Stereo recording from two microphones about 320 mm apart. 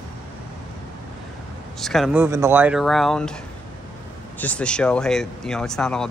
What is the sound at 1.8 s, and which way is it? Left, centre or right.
Speech, centre.